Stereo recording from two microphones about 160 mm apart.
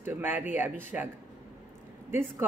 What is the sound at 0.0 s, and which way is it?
A woman's voice, 15° right (ahead or behind).